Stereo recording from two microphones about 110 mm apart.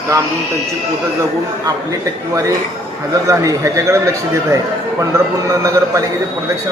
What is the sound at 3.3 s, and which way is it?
Speech, 30° right (ahead or behind).